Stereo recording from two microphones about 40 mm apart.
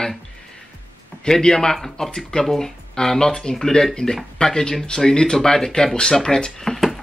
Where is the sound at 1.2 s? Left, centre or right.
Centre.